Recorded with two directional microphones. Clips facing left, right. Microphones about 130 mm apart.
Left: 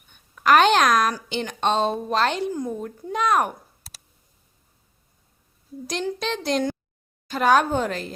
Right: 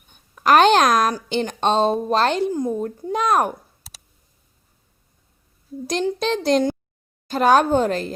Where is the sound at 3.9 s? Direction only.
Centre (ahead or behind).